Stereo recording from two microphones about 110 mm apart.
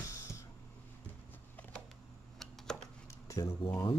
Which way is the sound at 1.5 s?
15° left (ahead or behind).